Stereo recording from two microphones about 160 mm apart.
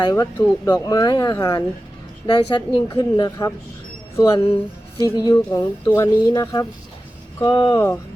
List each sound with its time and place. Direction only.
0.0 s speech: 25° left (ahead or behind)